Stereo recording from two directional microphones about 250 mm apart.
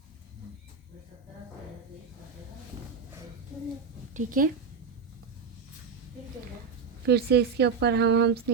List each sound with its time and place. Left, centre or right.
4.1 s speech: right
7.0 s speech: right